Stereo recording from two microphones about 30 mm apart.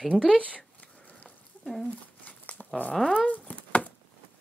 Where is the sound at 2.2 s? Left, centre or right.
Left.